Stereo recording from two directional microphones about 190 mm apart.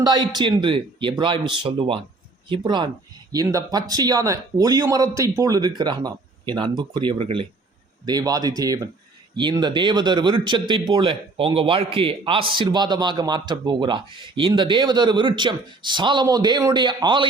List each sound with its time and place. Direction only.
0.0 s speech: 20° right (ahead or behind)